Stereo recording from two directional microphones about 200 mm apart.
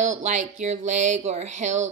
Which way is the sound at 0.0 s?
35° right (ahead or behind).